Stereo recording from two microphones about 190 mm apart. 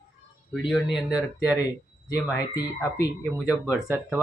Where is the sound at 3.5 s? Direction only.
10° right (ahead or behind).